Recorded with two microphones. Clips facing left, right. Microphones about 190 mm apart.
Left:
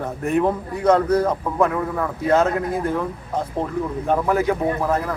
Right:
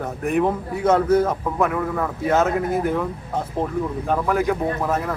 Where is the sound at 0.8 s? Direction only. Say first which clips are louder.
Even; 5° right (ahead or behind).